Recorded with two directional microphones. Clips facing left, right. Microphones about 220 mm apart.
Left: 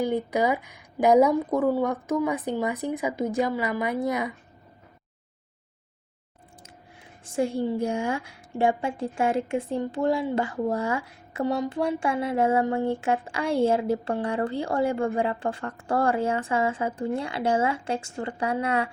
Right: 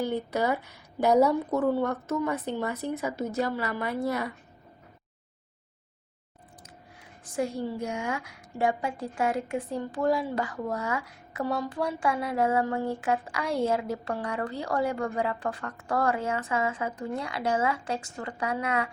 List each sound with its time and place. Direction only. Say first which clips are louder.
0.0 s a woman's voice: left 3 dB; 15° left (ahead or behind)
7.3 s a woman's voice: left 4 dB; 25° left (ahead or behind)